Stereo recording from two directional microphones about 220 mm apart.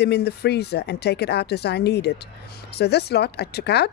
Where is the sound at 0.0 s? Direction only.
50° left (ahead or behind).